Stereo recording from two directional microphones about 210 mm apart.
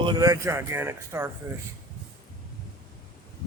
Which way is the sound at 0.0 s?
20° right (ahead or behind).